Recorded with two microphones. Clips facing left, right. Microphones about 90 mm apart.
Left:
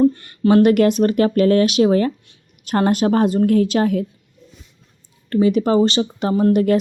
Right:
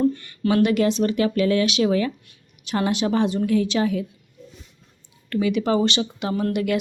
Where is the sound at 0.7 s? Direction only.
55° left (ahead or behind).